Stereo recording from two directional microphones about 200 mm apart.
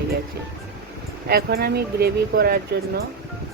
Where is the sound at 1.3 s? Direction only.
50° right (ahead or behind).